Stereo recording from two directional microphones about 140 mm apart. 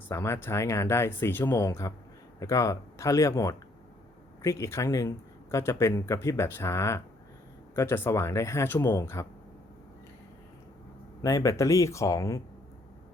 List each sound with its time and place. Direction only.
0.1 s speech: 20° left (ahead or behind)
11.2 s speech: 25° left (ahead or behind)